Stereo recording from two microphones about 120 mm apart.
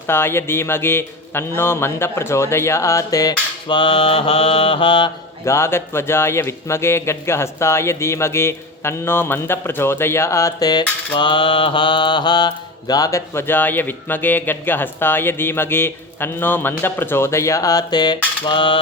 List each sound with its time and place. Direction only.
0.1 s speech: 20° left (ahead or behind)
3.8 s mantra: 45° left (ahead or behind)
5.5 s speech: 20° left (ahead or behind)
18.4 s mantra: 45° left (ahead or behind)